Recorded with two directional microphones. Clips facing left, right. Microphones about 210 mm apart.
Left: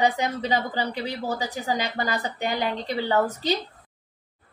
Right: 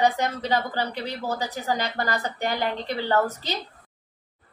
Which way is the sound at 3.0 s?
15° left (ahead or behind).